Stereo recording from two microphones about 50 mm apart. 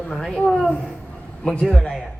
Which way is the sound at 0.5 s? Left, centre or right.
Centre.